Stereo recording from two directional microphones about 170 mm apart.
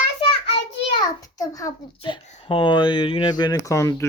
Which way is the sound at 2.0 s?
30° left (ahead or behind).